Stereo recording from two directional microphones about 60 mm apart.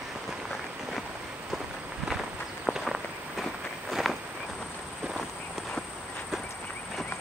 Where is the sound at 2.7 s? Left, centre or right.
Centre.